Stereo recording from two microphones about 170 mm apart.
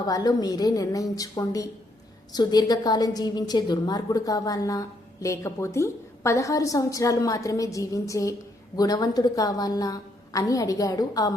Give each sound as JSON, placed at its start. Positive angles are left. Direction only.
{"t": 0.0, "sound": "a woman's voice", "side_deg": 20}